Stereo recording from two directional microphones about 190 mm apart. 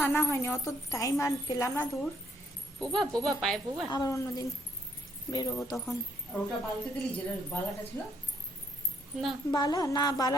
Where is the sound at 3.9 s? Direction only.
20° left (ahead or behind).